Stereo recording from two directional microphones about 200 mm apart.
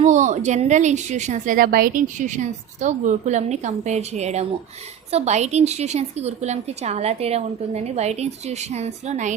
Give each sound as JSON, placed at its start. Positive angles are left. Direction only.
{"t": 0.0, "sound": "speech", "side_deg": -35}